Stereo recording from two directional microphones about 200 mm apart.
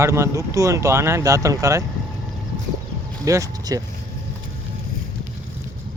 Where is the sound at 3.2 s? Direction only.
15° right (ahead or behind).